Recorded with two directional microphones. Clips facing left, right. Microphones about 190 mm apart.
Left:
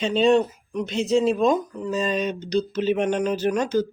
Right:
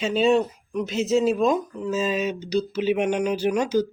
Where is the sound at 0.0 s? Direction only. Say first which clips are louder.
Left 1 dB; 5° right (ahead or behind).